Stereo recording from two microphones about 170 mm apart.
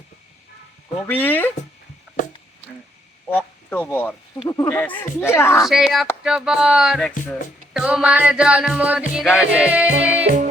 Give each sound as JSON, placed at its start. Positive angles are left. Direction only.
{"t": 1.0, "sound": "speech", "side_deg": 10}
{"t": 3.2, "sound": "speech", "side_deg": 10}
{"t": 4.4, "sound": "speech", "side_deg": 20}
{"t": 5.6, "sound": "speech", "side_deg": 0}
{"t": 7.7, "sound": "music", "side_deg": -5}